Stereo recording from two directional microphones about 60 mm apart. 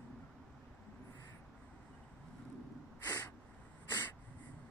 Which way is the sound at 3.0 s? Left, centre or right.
Left.